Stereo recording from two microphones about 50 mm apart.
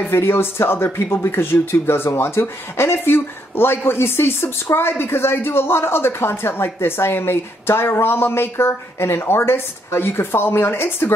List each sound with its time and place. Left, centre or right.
0.1 s speech: left